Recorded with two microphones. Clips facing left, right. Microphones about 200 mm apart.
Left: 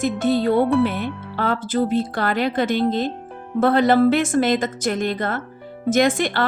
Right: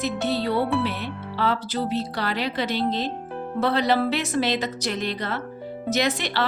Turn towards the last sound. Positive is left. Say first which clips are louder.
# left 6 dB
turn(degrees=50)  # may be behind; listen again after turning